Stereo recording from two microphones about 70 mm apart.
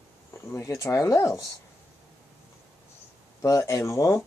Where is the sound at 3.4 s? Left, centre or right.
Left.